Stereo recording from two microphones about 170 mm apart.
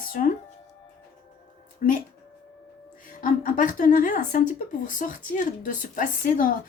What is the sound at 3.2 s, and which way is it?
A woman's voice, 50° left (ahead or behind).